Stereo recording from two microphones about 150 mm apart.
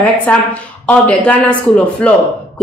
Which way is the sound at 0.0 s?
10° left (ahead or behind).